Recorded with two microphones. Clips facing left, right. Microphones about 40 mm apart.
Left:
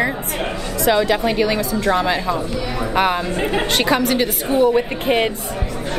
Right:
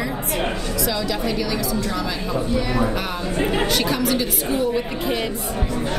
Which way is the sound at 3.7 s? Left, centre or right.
Left.